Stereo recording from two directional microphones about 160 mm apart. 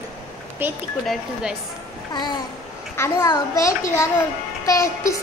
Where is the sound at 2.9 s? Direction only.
20° left (ahead or behind).